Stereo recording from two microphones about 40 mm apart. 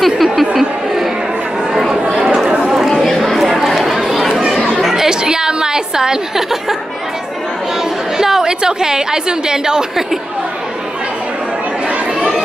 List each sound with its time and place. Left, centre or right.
0.0 s a sound: centre
0.6 s chatter: centre
2.1 s chatter: centre
3.2 s chatter: centre
4.3 s chatter: centre
4.8 s a sound: centre
8.2 s a woman's voice: centre